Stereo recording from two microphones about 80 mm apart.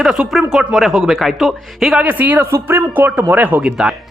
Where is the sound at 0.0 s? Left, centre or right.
Centre.